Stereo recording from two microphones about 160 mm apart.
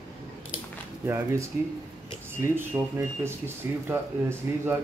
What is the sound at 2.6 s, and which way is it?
Speech, 15° right (ahead or behind).